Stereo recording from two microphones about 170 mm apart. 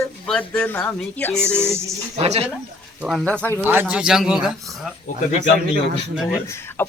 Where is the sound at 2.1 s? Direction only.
35° right (ahead or behind).